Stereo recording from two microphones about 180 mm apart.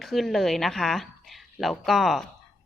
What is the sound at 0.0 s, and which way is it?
A woman's voice, centre (ahead or behind).